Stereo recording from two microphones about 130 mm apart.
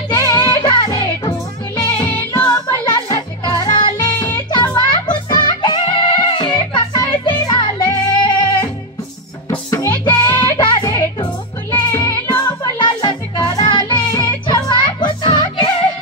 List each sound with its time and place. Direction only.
0.1 s music: 30° left (ahead or behind)
9.7 s music: 30° left (ahead or behind)